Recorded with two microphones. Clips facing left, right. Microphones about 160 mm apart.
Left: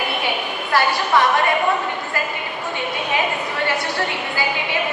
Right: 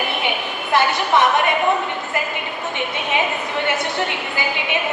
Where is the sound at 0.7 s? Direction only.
20° right (ahead or behind).